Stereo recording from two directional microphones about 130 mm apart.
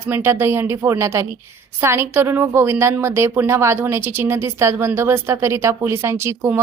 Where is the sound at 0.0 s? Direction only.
15° right (ahead or behind).